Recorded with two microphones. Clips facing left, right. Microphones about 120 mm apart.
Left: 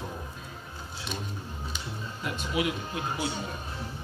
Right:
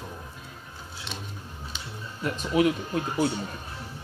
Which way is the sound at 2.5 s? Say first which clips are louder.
Right 8 dB; 40° right (ahead or behind).